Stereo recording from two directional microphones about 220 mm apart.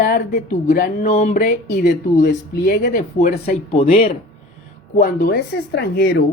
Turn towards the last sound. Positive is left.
turn(degrees=50)  # may be behind; listen again after turning